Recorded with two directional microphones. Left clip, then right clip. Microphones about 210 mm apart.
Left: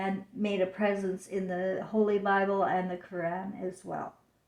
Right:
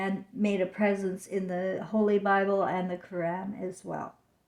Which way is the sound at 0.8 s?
50° right (ahead or behind).